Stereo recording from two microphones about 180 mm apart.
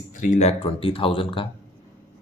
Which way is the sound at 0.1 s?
45° left (ahead or behind).